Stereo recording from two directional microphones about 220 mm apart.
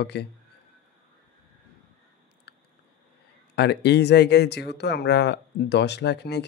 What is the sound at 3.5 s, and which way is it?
Speech, 50° left (ahead or behind).